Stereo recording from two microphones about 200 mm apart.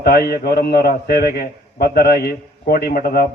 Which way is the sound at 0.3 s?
50° left (ahead or behind).